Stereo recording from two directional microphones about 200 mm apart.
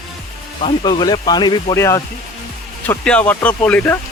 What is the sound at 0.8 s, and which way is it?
Speech, 20° left (ahead or behind).